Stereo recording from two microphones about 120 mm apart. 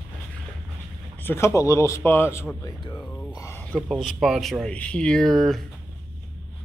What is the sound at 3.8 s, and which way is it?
Speech, 5° right (ahead or behind).